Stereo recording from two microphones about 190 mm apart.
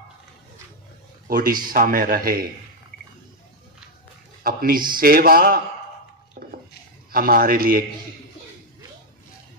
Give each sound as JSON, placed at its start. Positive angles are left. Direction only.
{"t": 1.2, "sound": "a man's voice", "side_deg": -50}
{"t": 4.4, "sound": "a man's voice", "side_deg": -50}
{"t": 6.4, "sound": "a sound", "side_deg": -50}
{"t": 7.1, "sound": "a man's voice", "side_deg": -50}